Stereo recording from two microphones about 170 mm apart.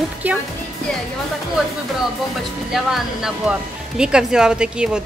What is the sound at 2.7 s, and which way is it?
Speech, centre (ahead or behind).